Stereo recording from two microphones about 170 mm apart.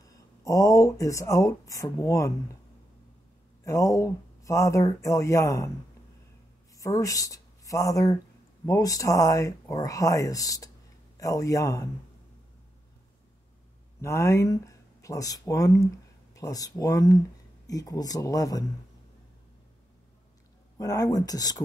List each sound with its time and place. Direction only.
0.0 s speech: 20° left (ahead or behind)
3.6 s speech: 20° left (ahead or behind)
6.8 s speech: 20° left (ahead or behind)
14.0 s speech: 15° left (ahead or behind)
20.7 s speech: 20° left (ahead or behind)